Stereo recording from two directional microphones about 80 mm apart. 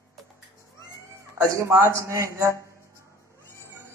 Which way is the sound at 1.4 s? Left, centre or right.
Right.